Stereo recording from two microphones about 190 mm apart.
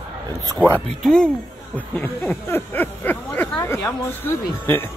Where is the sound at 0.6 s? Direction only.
10° left (ahead or behind).